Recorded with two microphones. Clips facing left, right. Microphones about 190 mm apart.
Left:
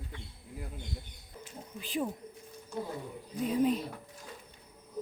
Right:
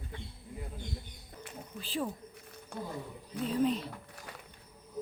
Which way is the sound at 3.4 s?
10° left (ahead or behind).